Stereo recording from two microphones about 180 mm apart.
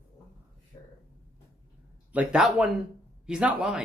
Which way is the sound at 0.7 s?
20° left (ahead or behind).